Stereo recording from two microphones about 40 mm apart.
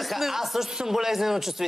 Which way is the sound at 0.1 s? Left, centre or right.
Centre.